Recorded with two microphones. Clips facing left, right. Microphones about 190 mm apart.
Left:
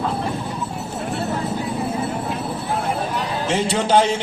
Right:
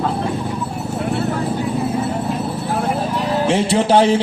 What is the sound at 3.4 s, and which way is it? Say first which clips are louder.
Music: right 4 dB; 35° right (ahead or behind).